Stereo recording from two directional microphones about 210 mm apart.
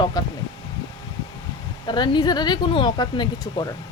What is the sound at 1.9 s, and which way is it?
Speech, 20° left (ahead or behind).